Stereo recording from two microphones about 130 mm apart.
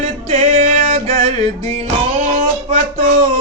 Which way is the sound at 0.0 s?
55° right (ahead or behind).